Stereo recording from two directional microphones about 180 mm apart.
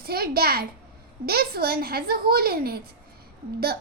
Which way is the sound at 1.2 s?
60° right (ahead or behind).